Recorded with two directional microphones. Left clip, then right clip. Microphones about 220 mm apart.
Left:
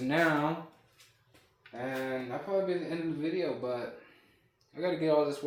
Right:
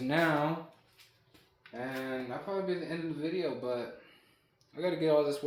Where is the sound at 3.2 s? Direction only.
15° right (ahead or behind).